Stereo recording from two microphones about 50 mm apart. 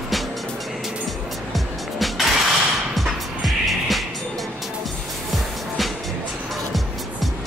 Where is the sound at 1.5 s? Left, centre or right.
Centre.